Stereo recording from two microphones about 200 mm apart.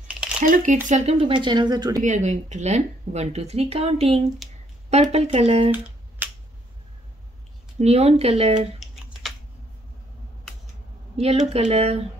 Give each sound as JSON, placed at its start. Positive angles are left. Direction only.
{"t": 0.4, "sound": "a woman's voice", "side_deg": -40}
{"t": 2.0, "sound": "speech", "side_deg": -35}
{"t": 4.4, "sound": "a sound", "side_deg": 0}
{"t": 4.8, "sound": "speech", "side_deg": -30}
{"t": 5.7, "sound": "finger snapping", "side_deg": -5}
{"t": 7.8, "sound": "speech", "side_deg": -30}
{"t": 11.1, "sound": "speech", "side_deg": -30}